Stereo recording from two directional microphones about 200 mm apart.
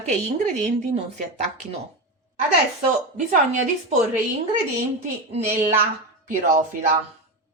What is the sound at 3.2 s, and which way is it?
Speech, 35° right (ahead or behind).